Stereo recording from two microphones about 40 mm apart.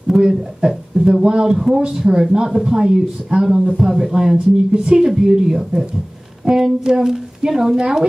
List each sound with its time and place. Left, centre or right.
0.2 s speech: centre